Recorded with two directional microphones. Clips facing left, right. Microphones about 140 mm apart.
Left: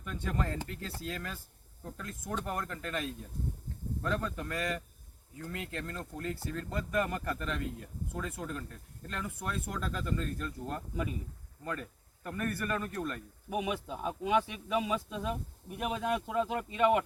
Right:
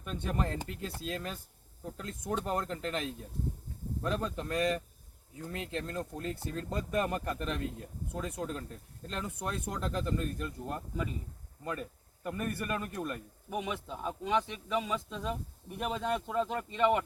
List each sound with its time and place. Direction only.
0.1 s speech: 20° right (ahead or behind)
13.5 s speech: 5° left (ahead or behind)